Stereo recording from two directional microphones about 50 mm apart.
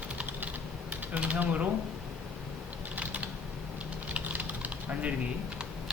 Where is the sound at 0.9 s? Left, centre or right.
Right.